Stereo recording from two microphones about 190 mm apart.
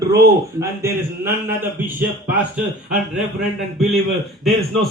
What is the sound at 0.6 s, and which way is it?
A man's voice, 15° right (ahead or behind).